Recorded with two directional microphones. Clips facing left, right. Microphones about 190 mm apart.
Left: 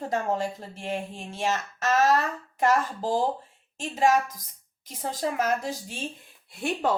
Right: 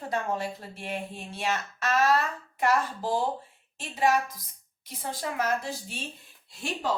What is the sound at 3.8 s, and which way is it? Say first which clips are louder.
A woman's voice: left 3 dB; 45° left (ahead or behind).